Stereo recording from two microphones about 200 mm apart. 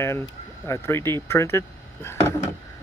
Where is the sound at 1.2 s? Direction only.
15° left (ahead or behind).